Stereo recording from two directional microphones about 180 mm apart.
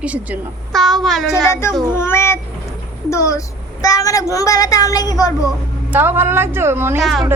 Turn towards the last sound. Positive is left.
turn(degrees=0)  # may be behind; listen again after turning